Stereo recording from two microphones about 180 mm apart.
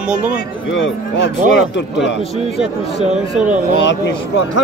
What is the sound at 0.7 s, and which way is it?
Speech, 90° left.